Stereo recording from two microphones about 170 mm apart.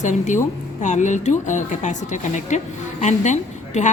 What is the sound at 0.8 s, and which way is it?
A woman's voice, 45° left (ahead or behind).